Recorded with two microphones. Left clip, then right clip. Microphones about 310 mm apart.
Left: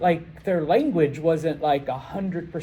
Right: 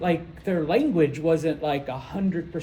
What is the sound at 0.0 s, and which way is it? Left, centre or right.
Speech, centre.